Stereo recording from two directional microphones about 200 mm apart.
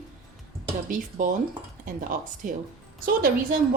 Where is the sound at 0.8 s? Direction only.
40° right (ahead or behind).